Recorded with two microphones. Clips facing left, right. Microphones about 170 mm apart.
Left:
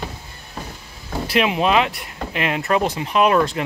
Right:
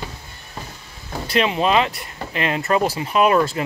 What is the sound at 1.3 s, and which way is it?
Speech, 5° left (ahead or behind).